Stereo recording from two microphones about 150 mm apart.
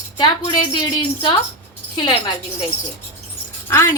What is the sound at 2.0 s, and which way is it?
Speech, 30° left (ahead or behind).